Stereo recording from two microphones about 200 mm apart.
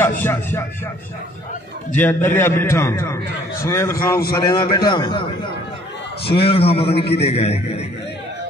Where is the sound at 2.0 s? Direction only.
10° left (ahead or behind); by 7.9 s 30° left (ahead or behind).